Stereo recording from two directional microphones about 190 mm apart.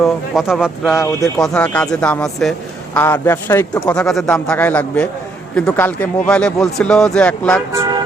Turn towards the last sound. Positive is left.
turn(degrees=5)  # may be behind; listen again after turning